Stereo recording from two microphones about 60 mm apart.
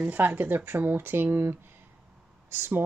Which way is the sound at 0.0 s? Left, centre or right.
Right.